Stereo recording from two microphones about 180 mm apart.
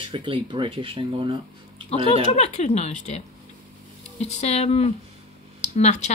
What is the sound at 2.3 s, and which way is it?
Speech, 35° left (ahead or behind).